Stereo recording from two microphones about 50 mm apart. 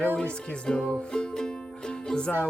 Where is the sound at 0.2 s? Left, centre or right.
Centre.